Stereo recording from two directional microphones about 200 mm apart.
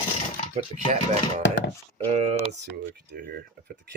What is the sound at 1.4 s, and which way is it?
Speech, 60° left (ahead or behind).